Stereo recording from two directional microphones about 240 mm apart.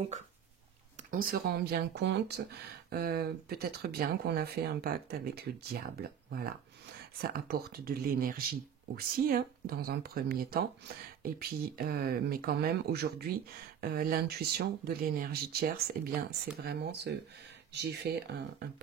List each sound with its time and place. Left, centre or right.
1.1 s speech: right
7.2 s speech: right